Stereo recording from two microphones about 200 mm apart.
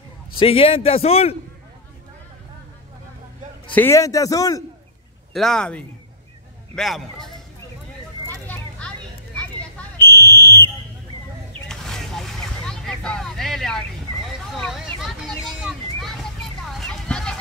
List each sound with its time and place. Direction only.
0.4 s a man's voice: 25° left (ahead or behind)
3.7 s a man's voice: 10° left (ahead or behind)
5.3 s speech: centre (ahead or behind)
8.5 s children playing: 5° left (ahead or behind)
9.9 s fire alarm: 10° left (ahead or behind)
11.6 s vehicle: centre (ahead or behind)
16.7 s a sound: 5° left (ahead or behind)